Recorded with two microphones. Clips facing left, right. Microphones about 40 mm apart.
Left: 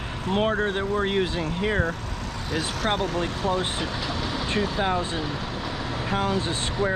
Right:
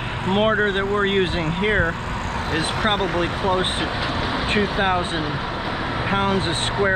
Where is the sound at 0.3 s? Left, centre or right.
Right.